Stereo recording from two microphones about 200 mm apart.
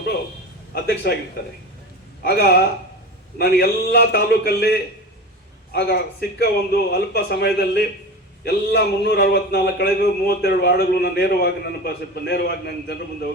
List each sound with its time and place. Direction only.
0.7 s a man's voice: 50° left (ahead or behind)
2.2 s a man's voice: 55° left (ahead or behind)